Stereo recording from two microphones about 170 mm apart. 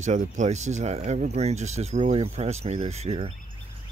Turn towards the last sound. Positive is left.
turn(degrees=-35)  # may be behind; listen again after turning